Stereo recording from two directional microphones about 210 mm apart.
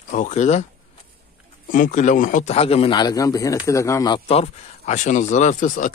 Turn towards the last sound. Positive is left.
turn(degrees=35)  # may be behind; listen again after turning